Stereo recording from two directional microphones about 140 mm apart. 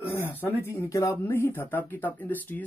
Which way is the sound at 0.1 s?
15° left (ahead or behind).